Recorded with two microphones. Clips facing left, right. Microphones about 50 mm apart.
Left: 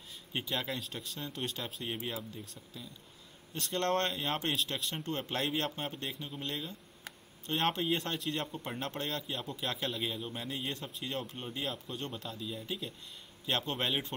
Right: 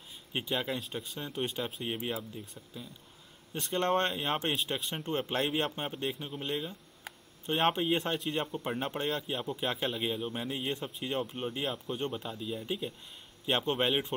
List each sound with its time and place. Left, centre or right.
0.3 s a man's voice: centre